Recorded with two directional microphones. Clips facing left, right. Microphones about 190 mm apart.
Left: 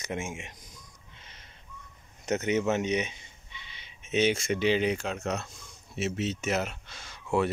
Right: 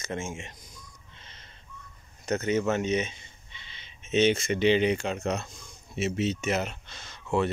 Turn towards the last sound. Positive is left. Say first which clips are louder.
# even
turn(degrees=10)  # may be behind; listen again after turning